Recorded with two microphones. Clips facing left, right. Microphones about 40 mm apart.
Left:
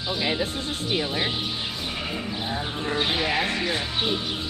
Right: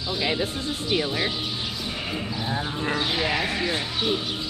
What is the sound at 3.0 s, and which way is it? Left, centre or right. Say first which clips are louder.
Speech: left 2 dB; left.